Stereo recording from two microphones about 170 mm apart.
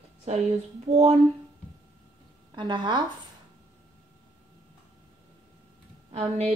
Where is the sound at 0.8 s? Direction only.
40° right (ahead or behind).